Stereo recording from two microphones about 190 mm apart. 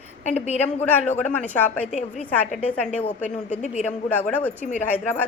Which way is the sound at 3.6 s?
40° left (ahead or behind).